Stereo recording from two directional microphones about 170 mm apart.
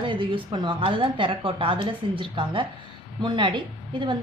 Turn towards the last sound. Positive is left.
turn(degrees=-30)  # may be behind; listen again after turning